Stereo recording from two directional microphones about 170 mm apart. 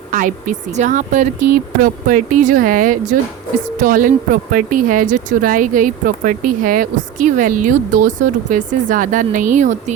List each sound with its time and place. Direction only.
0.1 s speech: 50° right (ahead or behind)